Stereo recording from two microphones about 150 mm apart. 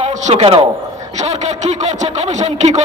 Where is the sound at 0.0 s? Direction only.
50° right (ahead or behind).